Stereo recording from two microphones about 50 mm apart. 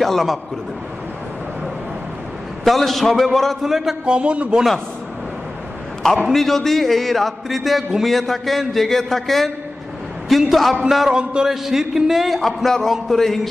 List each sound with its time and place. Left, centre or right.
0.0 s a man's voice: centre
2.6 s a man's voice: centre
4.0 s a man's voice: right
6.3 s a man's voice: centre
10.5 s a man's voice: centre
11.1 s a man's voice: centre